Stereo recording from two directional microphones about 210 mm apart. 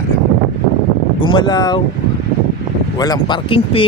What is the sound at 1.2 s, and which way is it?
Speech, 20° left (ahead or behind).